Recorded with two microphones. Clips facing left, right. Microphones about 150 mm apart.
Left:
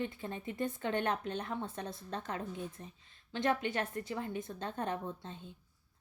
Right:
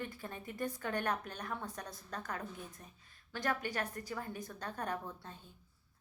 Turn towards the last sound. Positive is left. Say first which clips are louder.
# left 3 dB
turn(degrees=25)  # may be behind; listen again after turning